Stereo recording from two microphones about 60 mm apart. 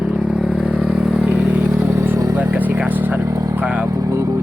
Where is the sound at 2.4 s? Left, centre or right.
Right.